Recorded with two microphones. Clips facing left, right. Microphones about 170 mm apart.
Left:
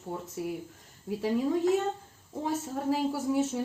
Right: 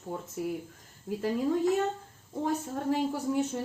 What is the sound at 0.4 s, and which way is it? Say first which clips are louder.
A woman's voice: right 3 dB; centre (ahead or behind).